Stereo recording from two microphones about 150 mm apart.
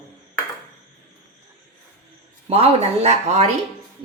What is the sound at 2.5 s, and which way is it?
A woman's voice, 45° right (ahead or behind).